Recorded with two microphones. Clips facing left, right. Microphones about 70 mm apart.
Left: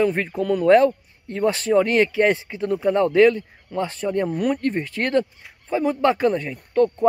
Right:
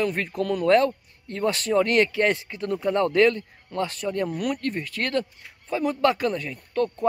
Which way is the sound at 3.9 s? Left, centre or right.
Left.